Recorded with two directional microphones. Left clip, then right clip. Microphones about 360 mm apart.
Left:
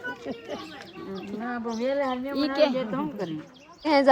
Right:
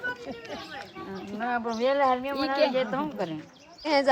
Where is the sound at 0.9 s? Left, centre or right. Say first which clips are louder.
Left 1 dB; centre.